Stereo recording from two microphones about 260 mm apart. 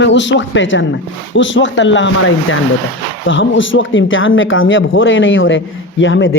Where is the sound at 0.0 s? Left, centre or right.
Left.